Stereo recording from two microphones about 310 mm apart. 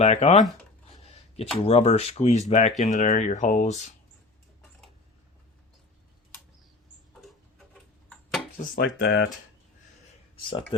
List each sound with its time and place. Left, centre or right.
0.0 s speech: left
1.5 s speech: centre
7.7 s tick-tock: centre
8.5 s speech: left
10.3 s speech: centre